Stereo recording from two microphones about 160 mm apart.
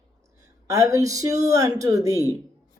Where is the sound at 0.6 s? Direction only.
20° right (ahead or behind).